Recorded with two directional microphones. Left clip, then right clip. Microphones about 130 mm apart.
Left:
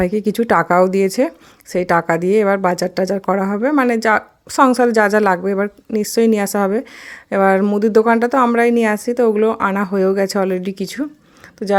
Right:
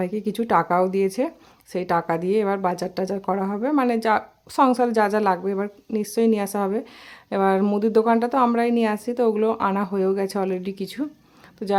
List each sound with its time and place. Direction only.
0.0 s a woman's voice: 35° left (ahead or behind); by 11.8 s 20° left (ahead or behind)